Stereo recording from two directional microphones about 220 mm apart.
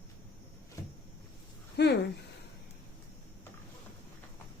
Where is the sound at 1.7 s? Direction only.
50° left (ahead or behind).